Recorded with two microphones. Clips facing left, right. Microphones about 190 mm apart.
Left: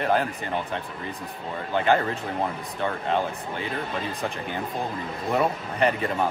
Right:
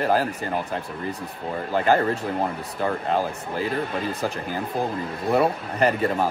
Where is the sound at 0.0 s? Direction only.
35° right (ahead or behind).